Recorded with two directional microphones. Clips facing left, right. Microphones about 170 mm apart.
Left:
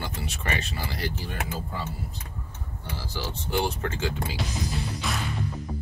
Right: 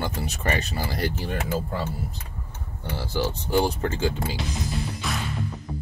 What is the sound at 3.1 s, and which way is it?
Speech, 40° right (ahead or behind).